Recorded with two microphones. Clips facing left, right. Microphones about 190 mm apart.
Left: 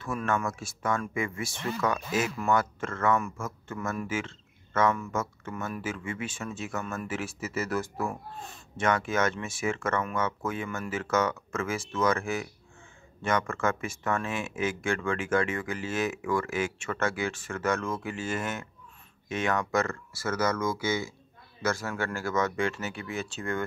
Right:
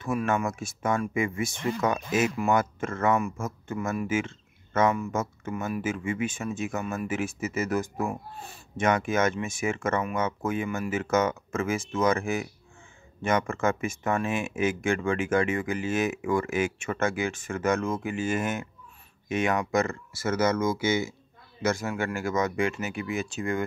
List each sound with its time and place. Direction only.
0.0 s speech: 15° right (ahead or behind)